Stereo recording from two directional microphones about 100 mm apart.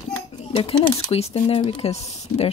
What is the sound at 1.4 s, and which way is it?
Speech, 55° left (ahead or behind).